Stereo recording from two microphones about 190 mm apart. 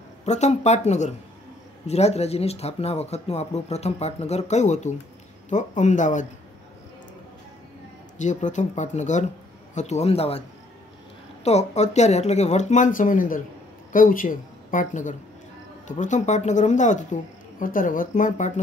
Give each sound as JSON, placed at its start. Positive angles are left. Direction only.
{"t": 0.2, "sound": "speech", "side_deg": 35}
{"t": 8.2, "sound": "speech", "side_deg": 40}
{"t": 11.4, "sound": "speech", "side_deg": 35}